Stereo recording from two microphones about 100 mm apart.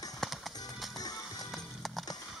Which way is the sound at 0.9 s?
40° left (ahead or behind).